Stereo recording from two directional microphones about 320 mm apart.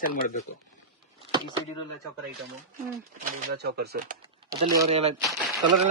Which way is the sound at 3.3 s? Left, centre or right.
Right.